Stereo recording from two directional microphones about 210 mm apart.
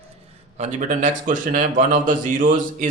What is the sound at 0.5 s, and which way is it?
A man's voice, 35° right (ahead or behind).